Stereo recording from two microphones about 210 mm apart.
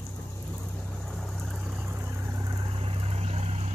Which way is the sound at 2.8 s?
25° right (ahead or behind).